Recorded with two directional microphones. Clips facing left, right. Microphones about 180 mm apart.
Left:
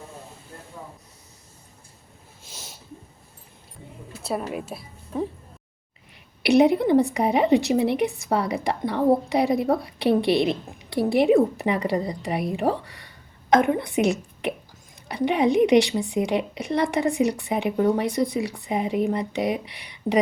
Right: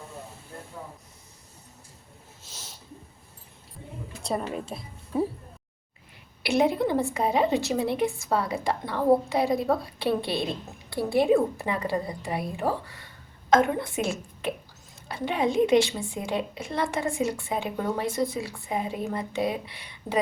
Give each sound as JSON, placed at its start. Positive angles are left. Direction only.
{"t": 2.4, "sound": "a sound", "side_deg": 10}
{"t": 4.2, "sound": "a woman's voice", "side_deg": 5}
{"t": 6.4, "sound": "a woman's voice", "side_deg": 20}
{"t": 10.1, "sound": "a woman's voice", "side_deg": 70}
{"t": 10.3, "sound": "a woman's voice", "side_deg": 20}